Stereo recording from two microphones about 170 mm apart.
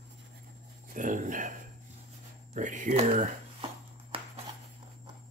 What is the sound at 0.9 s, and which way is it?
Speech, 50° right (ahead or behind).